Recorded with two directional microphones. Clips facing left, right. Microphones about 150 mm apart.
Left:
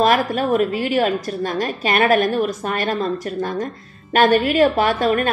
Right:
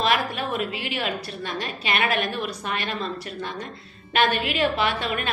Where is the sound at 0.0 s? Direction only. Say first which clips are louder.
Left 7 dB; 45° left (ahead or behind).